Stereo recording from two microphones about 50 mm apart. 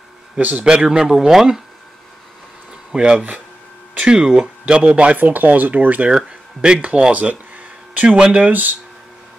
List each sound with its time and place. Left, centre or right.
0.4 s speech: right
0.7 s speech: centre
2.9 s speech: centre; by 6.0 s right
6.0 s speech: centre
7.0 s a sound: right
8.2 s speech: right